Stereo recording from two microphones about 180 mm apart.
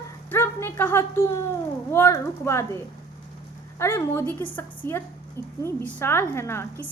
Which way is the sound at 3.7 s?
15° left (ahead or behind).